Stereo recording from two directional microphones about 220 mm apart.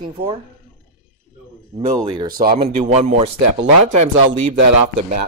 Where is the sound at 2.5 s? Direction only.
30° right (ahead or behind).